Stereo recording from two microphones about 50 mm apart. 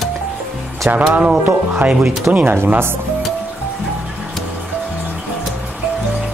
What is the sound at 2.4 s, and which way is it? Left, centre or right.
Speech, right.